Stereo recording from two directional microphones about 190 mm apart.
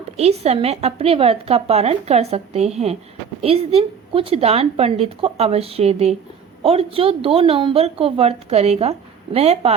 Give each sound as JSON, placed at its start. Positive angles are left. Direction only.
{"t": 0.2, "sound": "a woman's voice", "side_deg": -35}